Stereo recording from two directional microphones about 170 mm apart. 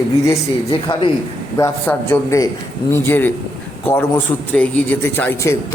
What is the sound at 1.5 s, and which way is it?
A man's voice, 15° left (ahead or behind).